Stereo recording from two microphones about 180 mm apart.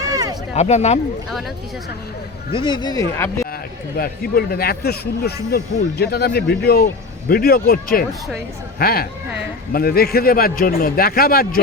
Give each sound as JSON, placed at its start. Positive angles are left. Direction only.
{"t": 0.0, "sound": "a sound", "side_deg": -20}
{"t": 0.5, "sound": "speech", "side_deg": 40}
{"t": 2.5, "sound": "speech", "side_deg": 25}
{"t": 3.9, "sound": "speech", "side_deg": 55}